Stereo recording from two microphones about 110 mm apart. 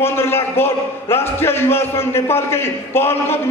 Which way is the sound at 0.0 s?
20° left (ahead or behind).